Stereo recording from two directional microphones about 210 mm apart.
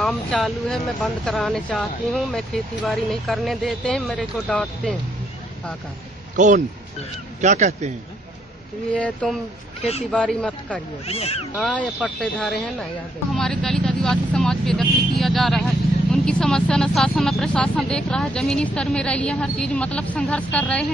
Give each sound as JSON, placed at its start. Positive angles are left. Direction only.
{"t": 0.0, "sound": "speech", "side_deg": 5}
{"t": 6.3, "sound": "speech", "side_deg": -35}
{"t": 8.9, "sound": "speech", "side_deg": 5}
{"t": 9.8, "sound": "speech", "side_deg": 30}
{"t": 10.1, "sound": "speech", "side_deg": 5}
{"t": 11.1, "sound": "speech", "side_deg": 30}
{"t": 11.7, "sound": "speech", "side_deg": -5}